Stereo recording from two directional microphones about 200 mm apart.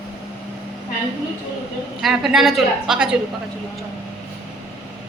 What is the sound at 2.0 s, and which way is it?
A woman's voice, centre (ahead or behind).